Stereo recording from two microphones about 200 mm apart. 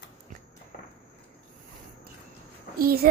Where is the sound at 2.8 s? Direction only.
50° right (ahead or behind).